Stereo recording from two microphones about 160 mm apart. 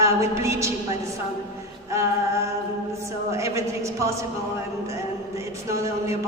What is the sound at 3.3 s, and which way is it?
Speech, 20° right (ahead or behind).